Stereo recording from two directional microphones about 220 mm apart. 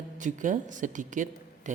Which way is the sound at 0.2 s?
35° right (ahead or behind).